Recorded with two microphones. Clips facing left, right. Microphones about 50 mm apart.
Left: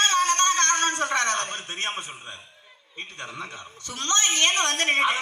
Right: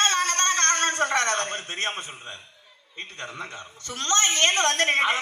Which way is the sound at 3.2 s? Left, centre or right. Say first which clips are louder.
Right 1 dB; right.